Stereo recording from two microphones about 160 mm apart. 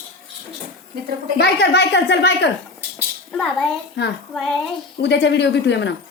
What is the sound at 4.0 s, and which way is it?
Speech, 90° left.